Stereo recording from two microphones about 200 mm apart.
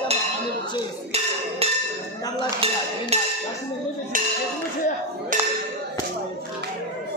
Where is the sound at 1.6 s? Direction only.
30° right (ahead or behind).